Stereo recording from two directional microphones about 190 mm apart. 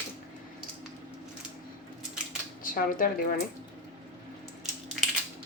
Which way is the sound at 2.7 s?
45° left (ahead or behind).